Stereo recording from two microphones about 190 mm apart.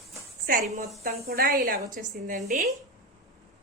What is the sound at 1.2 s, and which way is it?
Speech, 55° right (ahead or behind).